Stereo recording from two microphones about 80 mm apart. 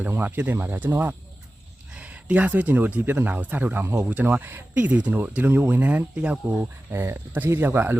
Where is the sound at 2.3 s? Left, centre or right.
Centre.